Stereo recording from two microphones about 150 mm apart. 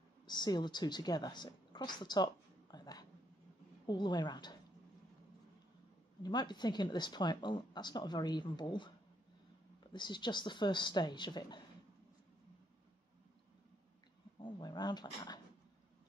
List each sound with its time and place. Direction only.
0.3 s a woman's voice: 30° left (ahead or behind)
6.2 s speech: 30° left (ahead or behind)
9.9 s a woman's voice: 30° left (ahead or behind)
14.4 s speech: 30° left (ahead or behind)